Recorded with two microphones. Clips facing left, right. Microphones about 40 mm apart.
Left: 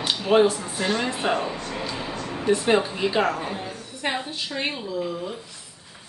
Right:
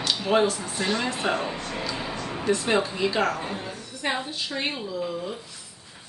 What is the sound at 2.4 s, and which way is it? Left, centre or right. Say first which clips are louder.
Speech: left 3 dB; centre.